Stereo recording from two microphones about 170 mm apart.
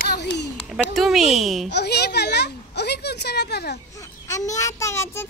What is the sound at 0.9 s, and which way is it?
Speech, centre (ahead or behind).